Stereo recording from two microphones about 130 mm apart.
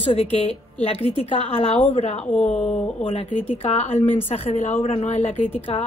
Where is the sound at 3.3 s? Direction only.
50° left (ahead or behind).